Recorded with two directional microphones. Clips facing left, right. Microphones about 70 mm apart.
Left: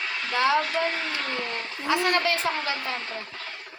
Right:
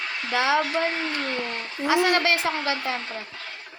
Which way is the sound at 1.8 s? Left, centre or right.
Right.